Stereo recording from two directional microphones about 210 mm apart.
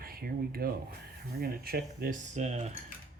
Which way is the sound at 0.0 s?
45° right (ahead or behind).